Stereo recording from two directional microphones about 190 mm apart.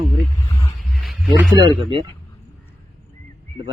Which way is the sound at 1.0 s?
Centre (ahead or behind).